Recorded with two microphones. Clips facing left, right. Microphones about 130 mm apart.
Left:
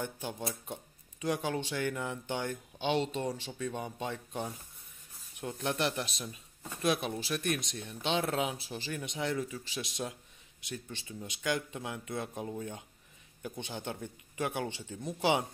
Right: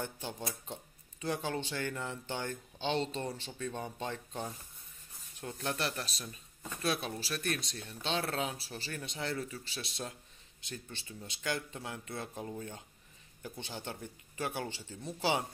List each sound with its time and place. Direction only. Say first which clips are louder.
0.0 s speech: left 2 dB; 10° left (ahead or behind)
0.4 s speech: left 3 dB; 25° left (ahead or behind)
1.2 s speech: left 3 dB; 10° left (ahead or behind)
6.2 s speech: left 2 dB; 10° left (ahead or behind)